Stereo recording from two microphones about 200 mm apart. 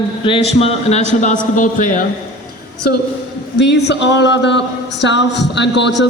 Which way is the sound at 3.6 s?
60° left (ahead or behind).